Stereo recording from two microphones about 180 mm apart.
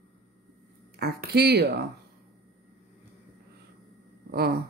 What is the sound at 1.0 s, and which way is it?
Speech, 65° right (ahead or behind).